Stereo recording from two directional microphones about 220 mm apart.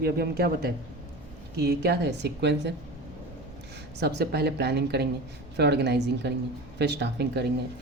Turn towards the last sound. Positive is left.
turn(degrees=-50)  # may be behind; listen again after turning